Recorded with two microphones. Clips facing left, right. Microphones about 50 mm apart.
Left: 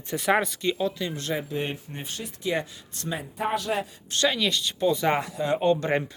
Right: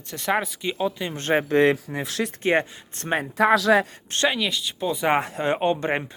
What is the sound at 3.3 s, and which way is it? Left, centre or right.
Speech, right.